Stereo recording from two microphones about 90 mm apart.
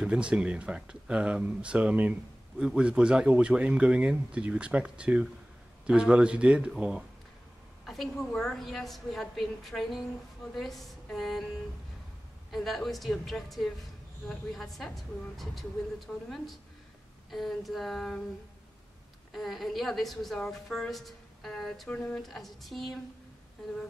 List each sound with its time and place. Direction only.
0.0 s speech: 10° right (ahead or behind)
7.8 s a woman's voice: centre (ahead or behind)
12.4 s a woman's voice: centre (ahead or behind)
16.1 s a woman's voice: centre (ahead or behind)
17.3 s a woman's voice: centre (ahead or behind)
19.3 s a woman's voice: centre (ahead or behind)